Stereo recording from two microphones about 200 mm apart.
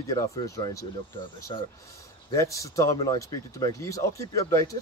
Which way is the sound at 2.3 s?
15° left (ahead or behind).